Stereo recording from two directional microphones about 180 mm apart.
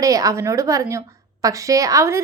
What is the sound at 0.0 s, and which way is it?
A woman's voice, 20° right (ahead or behind).